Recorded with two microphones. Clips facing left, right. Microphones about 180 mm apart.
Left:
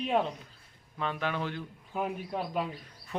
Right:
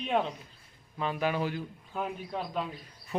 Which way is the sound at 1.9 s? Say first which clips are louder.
Left 2 dB; 5° left (ahead or behind).